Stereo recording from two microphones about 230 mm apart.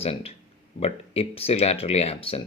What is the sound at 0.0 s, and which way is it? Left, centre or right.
Speech, left.